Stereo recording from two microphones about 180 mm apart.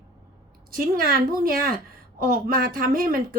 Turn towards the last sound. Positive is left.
turn(degrees=-55)  # may be behind; listen again after turning